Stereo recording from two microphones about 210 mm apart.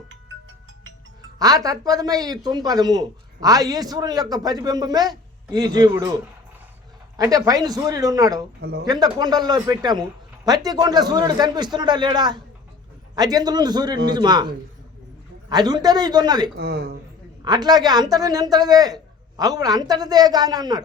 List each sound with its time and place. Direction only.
1.4 s speech: 15° right (ahead or behind)
7.2 s speech: 15° right (ahead or behind)
16.6 s speech: 50° right (ahead or behind)
17.4 s speech: 20° right (ahead or behind)